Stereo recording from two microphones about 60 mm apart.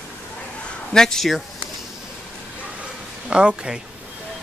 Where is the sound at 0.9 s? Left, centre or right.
Centre.